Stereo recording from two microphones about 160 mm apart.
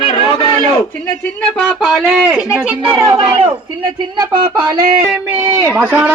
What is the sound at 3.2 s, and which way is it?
Speech, 35° right (ahead or behind).